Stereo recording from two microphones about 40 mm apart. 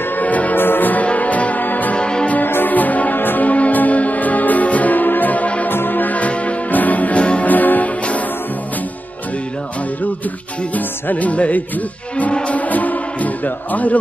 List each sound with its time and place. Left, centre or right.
0.2 s music: left
0.6 s church bell: left
1.0 s music: left
2.0 s music: left
2.4 s music: left
3.2 s music: left
3.4 s music: left
5.7 s music: left
6.1 s music: left
7.4 s music: left
10.7 s music: left